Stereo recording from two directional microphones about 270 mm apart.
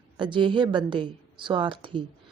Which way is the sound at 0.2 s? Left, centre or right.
Centre.